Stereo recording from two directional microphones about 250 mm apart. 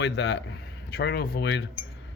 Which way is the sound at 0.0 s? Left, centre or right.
Left.